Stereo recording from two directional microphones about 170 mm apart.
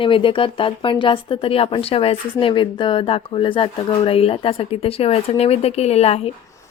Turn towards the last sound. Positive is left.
turn(degrees=35)  # may be behind; listen again after turning